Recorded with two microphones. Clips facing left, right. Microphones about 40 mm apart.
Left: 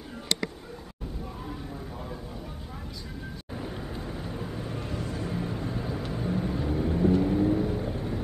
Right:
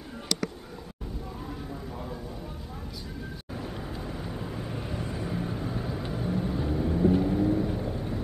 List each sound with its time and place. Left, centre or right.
3.5 s vehicle: centre
5.4 s vehicle: centre